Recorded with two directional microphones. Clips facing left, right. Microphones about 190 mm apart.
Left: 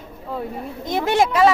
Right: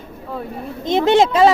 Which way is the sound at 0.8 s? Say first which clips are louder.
Right 5 dB; 25° right (ahead or behind).